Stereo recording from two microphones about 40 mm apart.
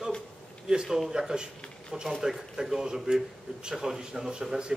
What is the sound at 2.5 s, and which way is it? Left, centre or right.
A man's voice, centre.